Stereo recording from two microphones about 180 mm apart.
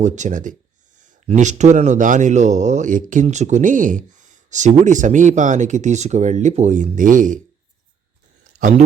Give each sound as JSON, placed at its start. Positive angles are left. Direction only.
{"t": 0.0, "sound": "speech", "side_deg": -45}